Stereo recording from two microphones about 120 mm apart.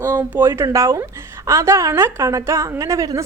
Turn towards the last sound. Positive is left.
turn(degrees=-25)  # may be behind; listen again after turning